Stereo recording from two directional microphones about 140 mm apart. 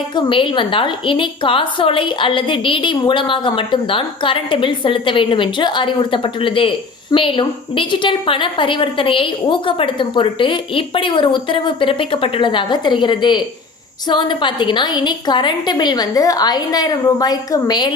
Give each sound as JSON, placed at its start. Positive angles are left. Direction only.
{"t": 0.2, "sound": "a woman's voice", "side_deg": 40}